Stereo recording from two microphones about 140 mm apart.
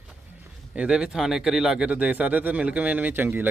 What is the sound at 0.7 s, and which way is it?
Speech, 5° right (ahead or behind).